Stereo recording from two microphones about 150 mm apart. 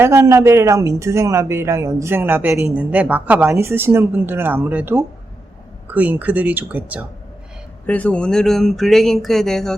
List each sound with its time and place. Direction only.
0.0 s a woman's voice: 15° right (ahead or behind)
7.9 s speech: 10° left (ahead or behind)